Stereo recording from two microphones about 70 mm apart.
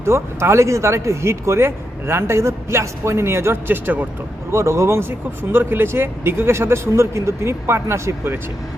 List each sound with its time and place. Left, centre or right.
0.0 s speech: right
4.5 s speech: right